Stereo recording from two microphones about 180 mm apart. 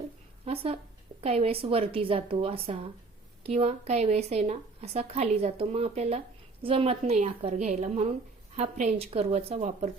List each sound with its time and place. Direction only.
0.4 s a woman's voice: 30° right (ahead or behind)